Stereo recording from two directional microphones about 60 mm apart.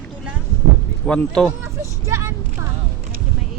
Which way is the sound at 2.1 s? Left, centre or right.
Right.